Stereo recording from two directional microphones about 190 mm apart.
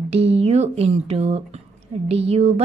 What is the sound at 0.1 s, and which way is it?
A woman's voice, 30° right (ahead or behind).